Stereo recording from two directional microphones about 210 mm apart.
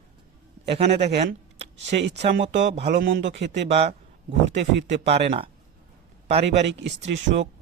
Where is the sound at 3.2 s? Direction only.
55° right (ahead or behind).